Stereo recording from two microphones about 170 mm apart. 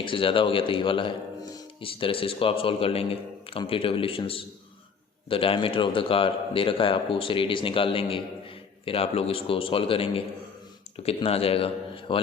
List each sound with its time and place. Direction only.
0.0 s a man's voice: 30° left (ahead or behind)